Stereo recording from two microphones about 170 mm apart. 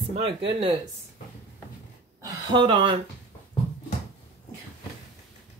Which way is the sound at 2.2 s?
25° right (ahead or behind).